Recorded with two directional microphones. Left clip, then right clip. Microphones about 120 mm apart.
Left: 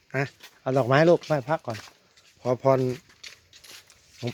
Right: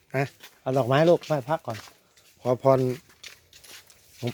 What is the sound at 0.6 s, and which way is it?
Speech, 15° left (ahead or behind).